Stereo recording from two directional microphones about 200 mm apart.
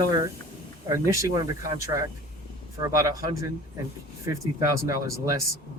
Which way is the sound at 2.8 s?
15° right (ahead or behind).